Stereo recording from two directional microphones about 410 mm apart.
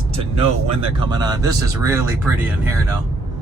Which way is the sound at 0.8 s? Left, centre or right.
Centre.